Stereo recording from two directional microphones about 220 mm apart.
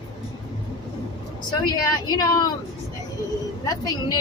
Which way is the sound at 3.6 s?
15° left (ahead or behind).